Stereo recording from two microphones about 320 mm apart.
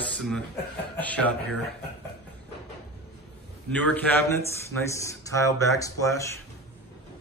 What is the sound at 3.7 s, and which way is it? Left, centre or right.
Speech, centre.